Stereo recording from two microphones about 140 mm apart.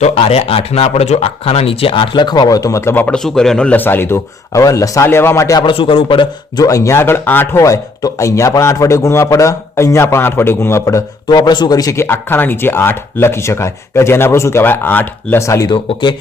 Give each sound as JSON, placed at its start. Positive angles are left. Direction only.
{"t": 0.0, "sound": "speech", "side_deg": 50}
{"t": 3.2, "sound": "speech", "side_deg": 5}
{"t": 15.7, "sound": "speech", "side_deg": 35}